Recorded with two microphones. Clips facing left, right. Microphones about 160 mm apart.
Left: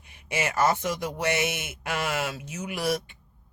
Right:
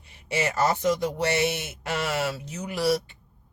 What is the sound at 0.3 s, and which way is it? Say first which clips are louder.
Speech: even; 35° right (ahead or behind).